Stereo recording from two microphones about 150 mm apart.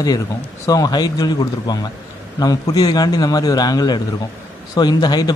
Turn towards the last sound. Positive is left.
turn(degrees=25)  # may be behind; listen again after turning